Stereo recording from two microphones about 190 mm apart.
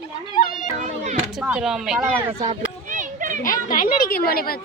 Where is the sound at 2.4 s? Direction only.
40° right (ahead or behind).